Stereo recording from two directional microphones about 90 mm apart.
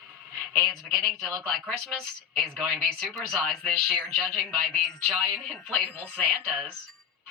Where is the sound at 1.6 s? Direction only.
15° left (ahead or behind).